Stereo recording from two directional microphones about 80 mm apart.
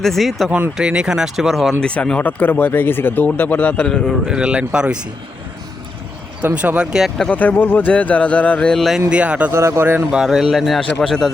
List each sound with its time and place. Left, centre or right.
0.0 s speech: centre
0.8 s speech: centre
1.8 s speech: centre
4.3 s speech: centre
6.4 s speech: centre
7.2 s speech: centre
9.0 s speech: centre
9.5 s speech: right
10.1 s speech: centre